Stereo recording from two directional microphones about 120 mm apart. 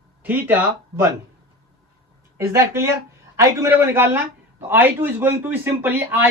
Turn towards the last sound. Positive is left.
turn(degrees=-15)  # may be behind; listen again after turning